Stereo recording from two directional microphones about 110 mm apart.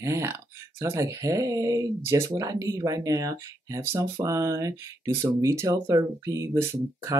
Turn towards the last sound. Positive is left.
turn(degrees=-25)  # may be behind; listen again after turning